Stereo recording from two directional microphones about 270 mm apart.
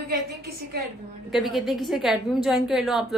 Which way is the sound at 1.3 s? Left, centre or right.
Centre.